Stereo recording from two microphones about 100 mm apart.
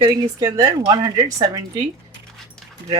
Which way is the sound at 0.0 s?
45° right (ahead or behind).